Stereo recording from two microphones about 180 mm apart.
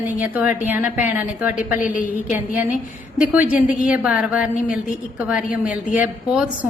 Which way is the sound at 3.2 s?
10° right (ahead or behind).